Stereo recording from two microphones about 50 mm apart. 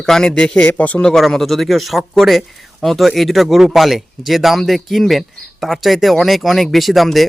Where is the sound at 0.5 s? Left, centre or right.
Left.